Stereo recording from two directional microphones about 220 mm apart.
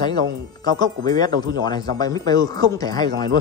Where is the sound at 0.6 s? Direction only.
20° left (ahead or behind).